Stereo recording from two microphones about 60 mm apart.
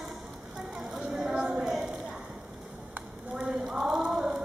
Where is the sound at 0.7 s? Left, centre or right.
Centre.